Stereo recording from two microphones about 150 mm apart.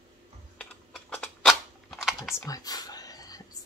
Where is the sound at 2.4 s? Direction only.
25° left (ahead or behind).